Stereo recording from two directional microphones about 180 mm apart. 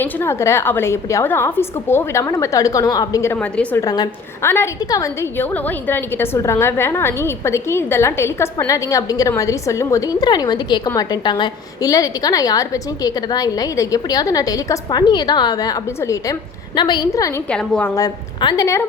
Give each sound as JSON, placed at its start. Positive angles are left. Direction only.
{"t": 0.0, "sound": "a woman's voice", "side_deg": 15}
{"t": 3.8, "sound": "a woman's voice", "side_deg": 20}
{"t": 17.5, "sound": "a woman's voice", "side_deg": 5}
{"t": 17.9, "sound": "a woman's voice", "side_deg": 20}